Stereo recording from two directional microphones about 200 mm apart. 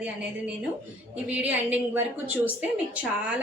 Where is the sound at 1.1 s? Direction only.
5° right (ahead or behind).